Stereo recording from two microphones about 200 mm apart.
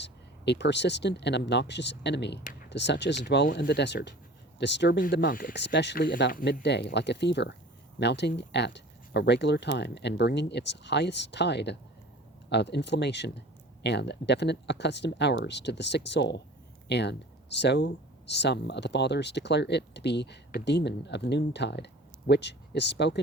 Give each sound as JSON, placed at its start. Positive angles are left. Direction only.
{"t": 0.0, "sound": "speech", "side_deg": 60}